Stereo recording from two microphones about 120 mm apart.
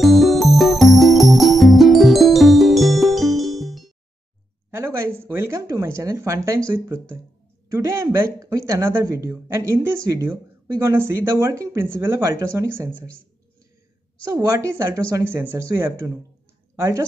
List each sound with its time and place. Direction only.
0.0 s music: centre (ahead or behind)
4.6 s speech: 20° right (ahead or behind)
14.3 s speech: 25° right (ahead or behind)